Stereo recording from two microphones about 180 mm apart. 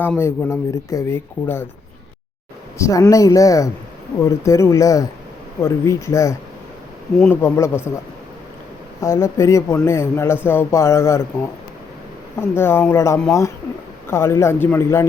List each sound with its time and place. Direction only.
0.0 s speech: 10° left (ahead or behind)
2.7 s speech: 15° left (ahead or behind)
9.0 s speech: 15° left (ahead or behind)
12.4 s speech: 15° left (ahead or behind)